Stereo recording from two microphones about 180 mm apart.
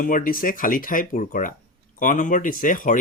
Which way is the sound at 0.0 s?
50° left (ahead or behind).